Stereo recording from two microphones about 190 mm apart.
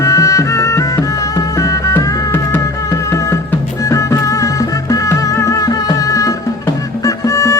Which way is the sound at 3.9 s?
15° left (ahead or behind).